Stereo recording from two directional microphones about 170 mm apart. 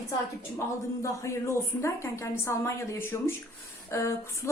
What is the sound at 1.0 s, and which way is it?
A woman's voice, 20° left (ahead or behind).